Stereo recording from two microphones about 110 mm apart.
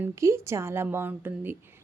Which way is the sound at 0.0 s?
25° right (ahead or behind).